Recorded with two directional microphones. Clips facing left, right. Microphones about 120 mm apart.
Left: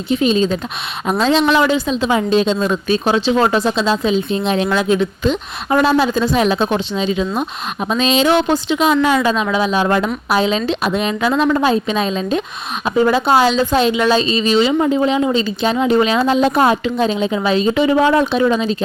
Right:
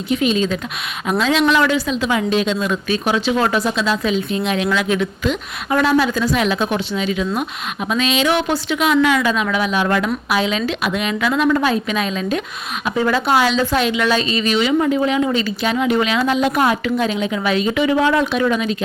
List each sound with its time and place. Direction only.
0.1 s a woman's voice: 30° left (ahead or behind)